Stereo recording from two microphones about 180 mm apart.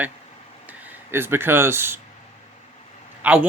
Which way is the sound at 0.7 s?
10° right (ahead or behind).